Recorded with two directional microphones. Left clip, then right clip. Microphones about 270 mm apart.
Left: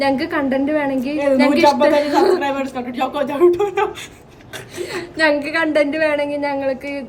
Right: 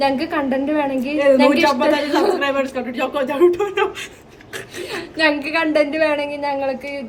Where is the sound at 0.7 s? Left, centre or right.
Centre.